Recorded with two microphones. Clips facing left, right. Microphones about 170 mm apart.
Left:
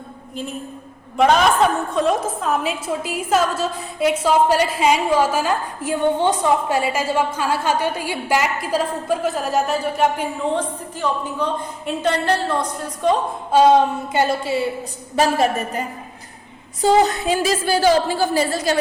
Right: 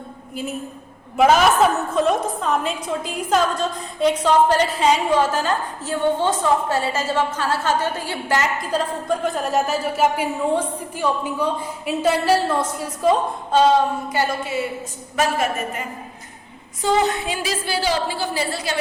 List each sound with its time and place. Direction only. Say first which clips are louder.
1.1 s a woman's voice: even; 5° right (ahead or behind)
13.5 s a woman's voice: left 3 dB; 10° left (ahead or behind)
14.1 s a sound: left 4 dB; 25° left (ahead or behind)
15.1 s a woman's voice: left 4 dB; 35° left (ahead or behind)
16.8 s a woman's voice: left 4 dB; 40° left (ahead or behind)